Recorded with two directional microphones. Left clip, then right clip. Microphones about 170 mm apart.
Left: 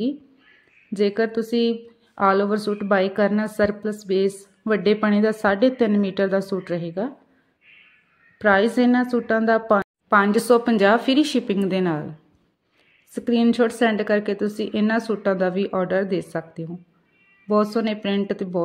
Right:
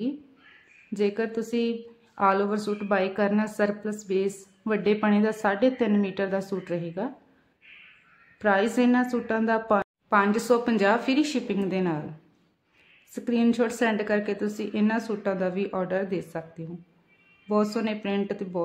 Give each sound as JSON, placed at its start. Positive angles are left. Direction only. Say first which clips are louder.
{"t": 0.9, "sound": "a woman's voice", "louder": "left 6 dB", "side_deg": 25}
{"t": 8.4, "sound": "a woman's voice", "louder": "left 5 dB", "side_deg": 25}
{"t": 13.1, "sound": "a woman's voice", "louder": "left 5 dB", "side_deg": 30}